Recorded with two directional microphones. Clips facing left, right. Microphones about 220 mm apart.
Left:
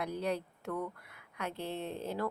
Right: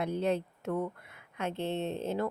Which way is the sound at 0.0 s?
25° right (ahead or behind).